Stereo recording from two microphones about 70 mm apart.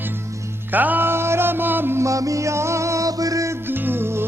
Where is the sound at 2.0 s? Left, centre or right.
Right.